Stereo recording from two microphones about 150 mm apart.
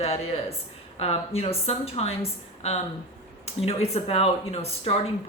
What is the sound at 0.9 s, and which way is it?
Speech, 40° left (ahead or behind).